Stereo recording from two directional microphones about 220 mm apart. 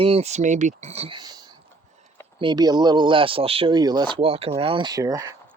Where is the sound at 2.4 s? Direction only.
20° right (ahead or behind).